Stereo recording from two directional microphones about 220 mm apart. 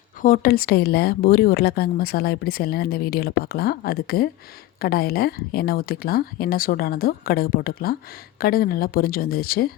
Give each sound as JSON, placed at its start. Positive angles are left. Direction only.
{"t": 0.2, "sound": "a woman's voice", "side_deg": 40}